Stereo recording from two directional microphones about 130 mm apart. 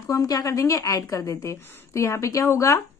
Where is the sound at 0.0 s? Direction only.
25° left (ahead or behind).